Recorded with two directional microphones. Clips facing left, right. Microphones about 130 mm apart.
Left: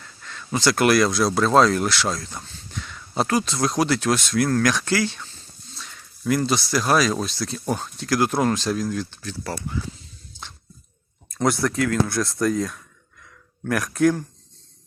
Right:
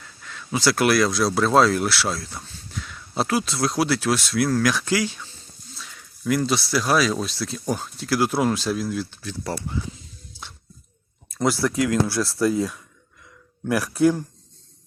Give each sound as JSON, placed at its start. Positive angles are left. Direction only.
{"t": 0.0, "sound": "speech", "side_deg": -5}
{"t": 9.4, "sound": "speech", "side_deg": -25}
{"t": 11.3, "sound": "speech", "side_deg": -5}